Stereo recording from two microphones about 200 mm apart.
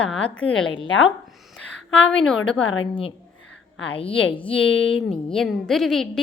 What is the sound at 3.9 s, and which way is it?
Speech, 25° left (ahead or behind).